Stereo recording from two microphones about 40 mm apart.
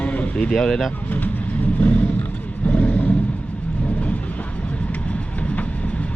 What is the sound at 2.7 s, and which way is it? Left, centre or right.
Vehicle, left.